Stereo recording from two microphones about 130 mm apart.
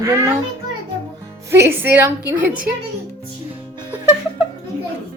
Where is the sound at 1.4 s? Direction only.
20° right (ahead or behind).